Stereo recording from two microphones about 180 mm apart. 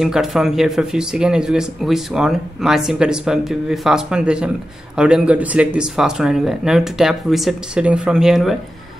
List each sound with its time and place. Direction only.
0.0 s speech: centre (ahead or behind)